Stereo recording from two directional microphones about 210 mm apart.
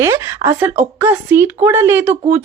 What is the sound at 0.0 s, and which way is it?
Speech, 10° right (ahead or behind).